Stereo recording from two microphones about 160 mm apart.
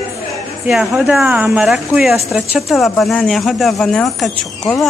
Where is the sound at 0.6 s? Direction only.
Centre (ahead or behind).